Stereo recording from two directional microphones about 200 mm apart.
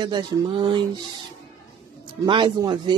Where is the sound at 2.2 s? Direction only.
20° right (ahead or behind).